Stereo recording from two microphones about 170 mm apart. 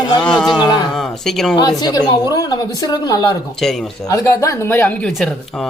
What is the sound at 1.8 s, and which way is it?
A woman's voice, 25° left (ahead or behind).